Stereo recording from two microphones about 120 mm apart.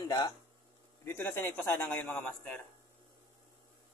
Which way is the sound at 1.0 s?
15° left (ahead or behind).